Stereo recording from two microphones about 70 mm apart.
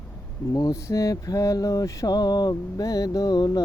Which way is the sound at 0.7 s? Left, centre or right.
Left.